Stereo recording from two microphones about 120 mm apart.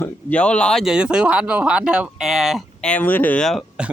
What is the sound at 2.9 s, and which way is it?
Speech, 15° left (ahead or behind).